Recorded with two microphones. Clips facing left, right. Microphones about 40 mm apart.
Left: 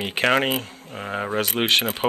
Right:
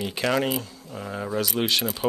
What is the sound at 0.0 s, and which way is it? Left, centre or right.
Speech, left.